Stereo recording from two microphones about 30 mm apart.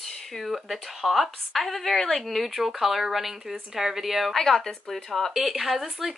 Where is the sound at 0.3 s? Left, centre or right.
Centre.